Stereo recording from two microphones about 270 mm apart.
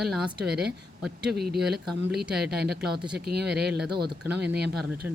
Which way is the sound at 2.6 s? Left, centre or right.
Right.